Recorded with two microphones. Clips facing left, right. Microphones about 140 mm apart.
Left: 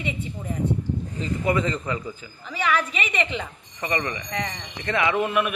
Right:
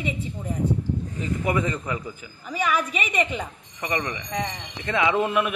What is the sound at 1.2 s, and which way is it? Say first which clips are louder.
A woman's voice: left 2 dB; 15° right (ahead or behind).